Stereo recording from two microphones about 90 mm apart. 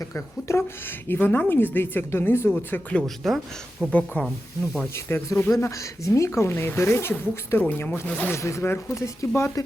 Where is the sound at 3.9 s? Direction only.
15° left (ahead or behind).